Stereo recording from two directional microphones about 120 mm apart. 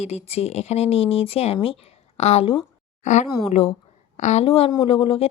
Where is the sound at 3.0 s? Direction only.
90° left.